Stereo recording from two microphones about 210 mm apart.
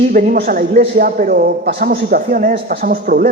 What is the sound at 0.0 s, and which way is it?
Speech, 40° right (ahead or behind).